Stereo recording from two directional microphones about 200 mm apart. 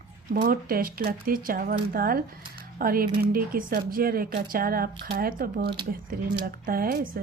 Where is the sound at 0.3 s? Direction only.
50° right (ahead or behind).